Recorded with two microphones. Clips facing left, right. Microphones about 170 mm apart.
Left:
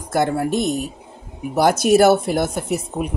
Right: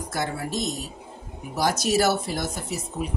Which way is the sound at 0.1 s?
55° left (ahead or behind).